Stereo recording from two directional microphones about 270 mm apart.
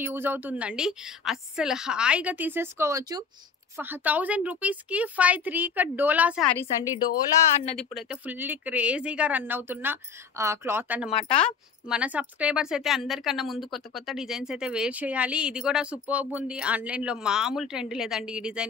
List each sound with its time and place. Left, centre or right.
0.0 s a woman's voice: centre
7.7 s speech: centre
11.1 s speech: left
11.3 s a woman's voice: centre